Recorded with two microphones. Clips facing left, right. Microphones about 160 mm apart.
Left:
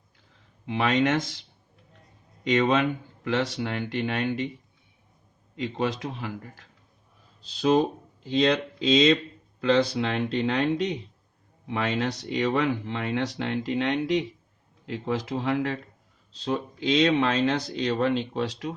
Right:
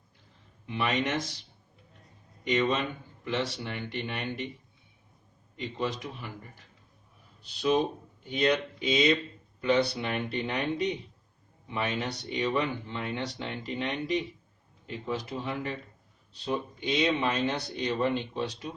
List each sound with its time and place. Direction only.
0.6 s speech: 90° left
5.5 s speech: 90° left